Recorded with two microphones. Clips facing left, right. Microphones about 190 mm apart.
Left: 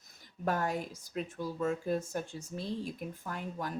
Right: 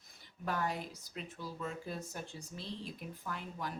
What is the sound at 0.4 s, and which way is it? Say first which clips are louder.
Speech: left 5 dB; 45° left (ahead or behind).